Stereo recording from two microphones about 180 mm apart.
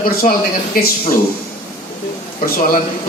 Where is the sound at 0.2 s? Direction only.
45° left (ahead or behind).